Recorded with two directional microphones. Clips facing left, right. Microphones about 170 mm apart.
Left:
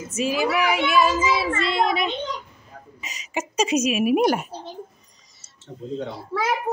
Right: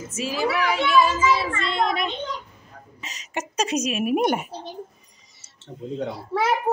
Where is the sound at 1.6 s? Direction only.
5° left (ahead or behind).